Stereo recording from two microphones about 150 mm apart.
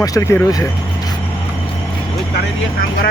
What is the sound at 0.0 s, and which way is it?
Speech, 20° left (ahead or behind).